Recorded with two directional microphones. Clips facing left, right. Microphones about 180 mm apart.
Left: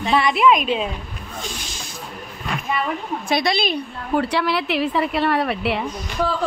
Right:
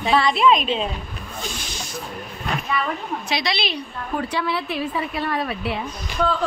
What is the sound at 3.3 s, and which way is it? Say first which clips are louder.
Speech: left 6 dB; 50° left (ahead or behind).